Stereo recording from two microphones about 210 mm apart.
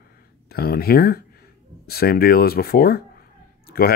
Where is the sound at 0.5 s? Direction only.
45° left (ahead or behind).